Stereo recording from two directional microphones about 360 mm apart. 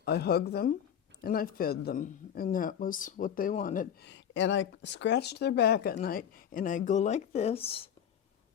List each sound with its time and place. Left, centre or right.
0.0 s speech: left